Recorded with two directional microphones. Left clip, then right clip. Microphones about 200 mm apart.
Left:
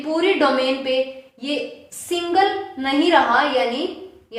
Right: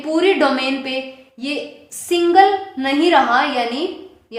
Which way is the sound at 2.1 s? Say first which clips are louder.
Right 6 dB; 30° right (ahead or behind).